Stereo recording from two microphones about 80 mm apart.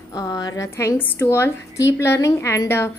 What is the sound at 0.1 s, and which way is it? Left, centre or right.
Speech, left.